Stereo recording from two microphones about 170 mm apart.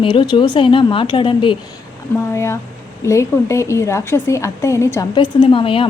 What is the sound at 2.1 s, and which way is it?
A woman's voice, 15° left (ahead or behind).